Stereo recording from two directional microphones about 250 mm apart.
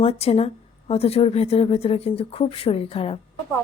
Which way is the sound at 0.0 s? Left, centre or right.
Left.